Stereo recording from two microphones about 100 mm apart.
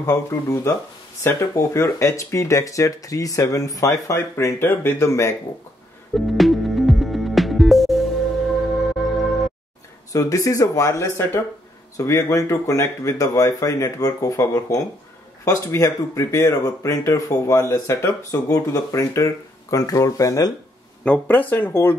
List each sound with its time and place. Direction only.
0.0 s speech: 30° left (ahead or behind)
6.1 s music: centre (ahead or behind)
10.1 s speech: 35° left (ahead or behind)
21.0 s speech: 15° left (ahead or behind)